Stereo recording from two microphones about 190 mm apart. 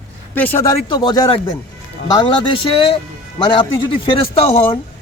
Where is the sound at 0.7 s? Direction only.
25° left (ahead or behind).